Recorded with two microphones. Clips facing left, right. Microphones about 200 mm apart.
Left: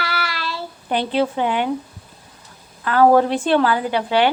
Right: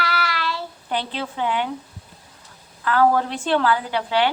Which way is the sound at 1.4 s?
15° left (ahead or behind).